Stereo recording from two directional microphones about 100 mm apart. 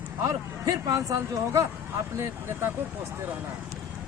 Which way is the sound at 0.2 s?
35° right (ahead or behind).